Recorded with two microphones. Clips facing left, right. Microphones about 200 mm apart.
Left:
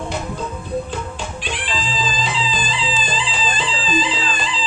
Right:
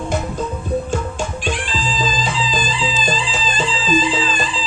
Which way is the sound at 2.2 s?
45° right (ahead or behind).